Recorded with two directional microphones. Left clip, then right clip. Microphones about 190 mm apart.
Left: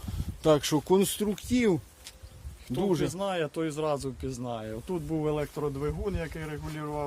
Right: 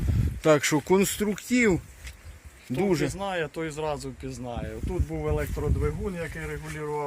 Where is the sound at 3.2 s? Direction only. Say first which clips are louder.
Even; 50° left (ahead or behind).